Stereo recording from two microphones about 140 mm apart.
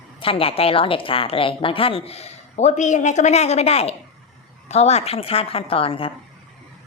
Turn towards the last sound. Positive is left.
turn(degrees=40)  # may be behind; listen again after turning